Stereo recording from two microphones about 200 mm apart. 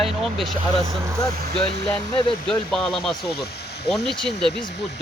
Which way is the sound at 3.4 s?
55° left (ahead or behind).